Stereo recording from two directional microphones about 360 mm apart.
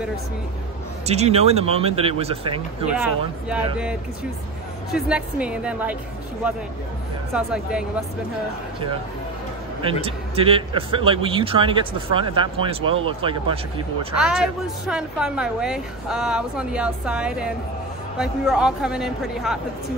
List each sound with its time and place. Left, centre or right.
1.0 s a man's voice: centre
2.9 s a woman's voice: centre
4.9 s a woman's voice: centre
7.3 s a woman's voice: centre
10.0 s a man's voice: centre
14.9 s a woman's voice: centre